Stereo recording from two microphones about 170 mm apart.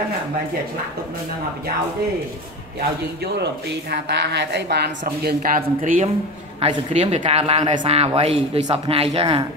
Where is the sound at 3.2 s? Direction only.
75° right (ahead or behind).